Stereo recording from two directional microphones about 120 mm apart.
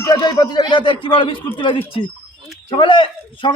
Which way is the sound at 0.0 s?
30° left (ahead or behind).